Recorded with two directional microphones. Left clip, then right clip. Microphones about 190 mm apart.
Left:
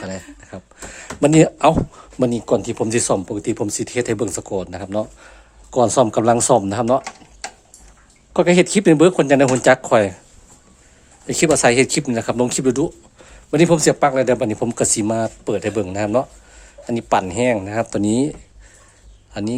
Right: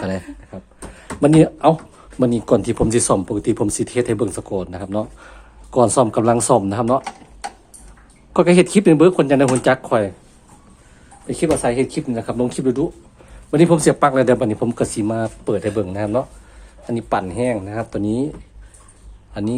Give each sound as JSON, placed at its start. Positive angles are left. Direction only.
{"t": 0.5, "sound": "a sound", "side_deg": 25}
{"t": 2.1, "sound": "speech", "side_deg": 15}
{"t": 2.4, "sound": "speech", "side_deg": 0}
{"t": 11.3, "sound": "speech", "side_deg": 35}
{"t": 13.5, "sound": "speech", "side_deg": 15}
{"t": 14.0, "sound": "speech", "side_deg": 5}
{"t": 19.3, "sound": "speech", "side_deg": 20}